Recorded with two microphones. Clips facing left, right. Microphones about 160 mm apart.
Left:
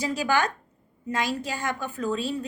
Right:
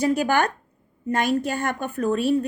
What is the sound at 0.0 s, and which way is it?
A woman's voice, 55° right (ahead or behind).